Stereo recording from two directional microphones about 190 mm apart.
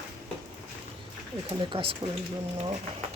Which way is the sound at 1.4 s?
25° right (ahead or behind).